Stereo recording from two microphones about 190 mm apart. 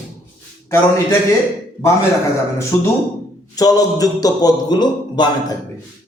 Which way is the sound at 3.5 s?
20° left (ahead or behind).